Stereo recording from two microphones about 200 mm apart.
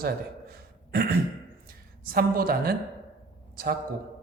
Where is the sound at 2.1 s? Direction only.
45° right (ahead or behind).